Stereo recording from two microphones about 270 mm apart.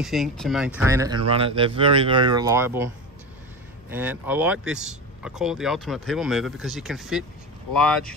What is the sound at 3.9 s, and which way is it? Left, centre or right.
Speech, centre.